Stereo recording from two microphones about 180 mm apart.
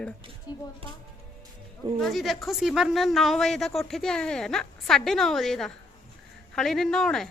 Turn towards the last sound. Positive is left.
turn(degrees=5)  # may be behind; listen again after turning